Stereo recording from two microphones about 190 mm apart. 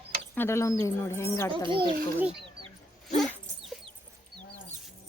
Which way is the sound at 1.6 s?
25° right (ahead or behind).